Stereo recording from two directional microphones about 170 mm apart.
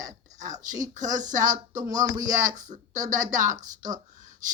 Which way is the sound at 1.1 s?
50° right (ahead or behind).